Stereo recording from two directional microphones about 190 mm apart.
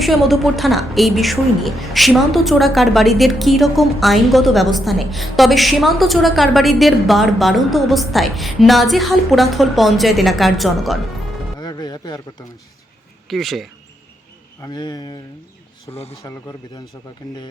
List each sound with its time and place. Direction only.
0.0 s a woman's voice: centre (ahead or behind)
11.6 s music: 20° left (ahead or behind)
13.2 s speech: centre (ahead or behind)
14.6 s speech: 20° left (ahead or behind)
15.9 s speech: 35° left (ahead or behind)
16.2 s a man's voice: 15° left (ahead or behind)